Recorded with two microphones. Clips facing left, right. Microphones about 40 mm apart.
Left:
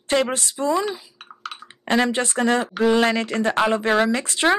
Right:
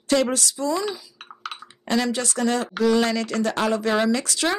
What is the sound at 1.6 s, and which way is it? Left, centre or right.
Speech, left.